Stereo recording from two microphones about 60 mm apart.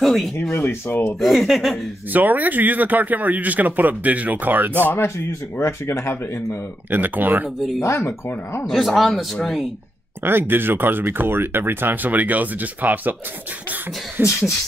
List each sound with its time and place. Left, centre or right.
0.0 s speech: centre
0.4 s speech: left
1.2 s speech: centre
2.1 s speech: right
4.8 s speech: left
6.9 s speech: right
7.8 s speech: left
8.6 s speech: centre
10.2 s speech: right
14.2 s speech: right